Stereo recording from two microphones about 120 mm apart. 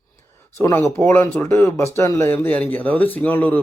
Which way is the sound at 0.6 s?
25° left (ahead or behind).